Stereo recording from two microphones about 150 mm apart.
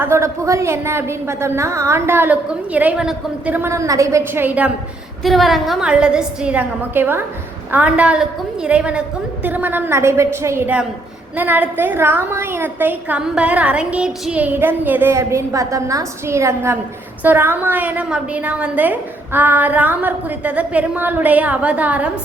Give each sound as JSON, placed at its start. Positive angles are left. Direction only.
{"t": 0.0, "sound": "a woman's voice", "side_deg": -20}
{"t": 5.2, "sound": "a woman's voice", "side_deg": 0}